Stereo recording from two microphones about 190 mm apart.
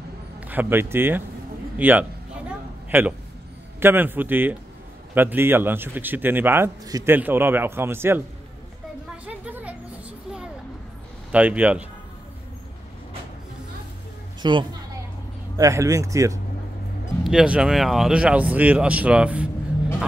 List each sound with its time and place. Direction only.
0.4 s a man's voice: 10° right (ahead or behind)
9.1 s a sound: 5° right (ahead or behind)
11.3 s a man's voice: 10° right (ahead or behind)
14.4 s a man's voice: 25° right (ahead or behind)
17.2 s speech: 5° right (ahead or behind)